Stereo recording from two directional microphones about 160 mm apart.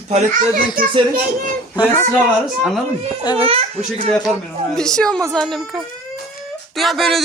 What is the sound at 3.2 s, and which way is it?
Speech, 25° left (ahead or behind).